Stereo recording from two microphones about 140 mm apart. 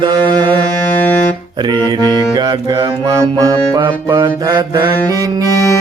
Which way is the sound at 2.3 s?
30° right (ahead or behind).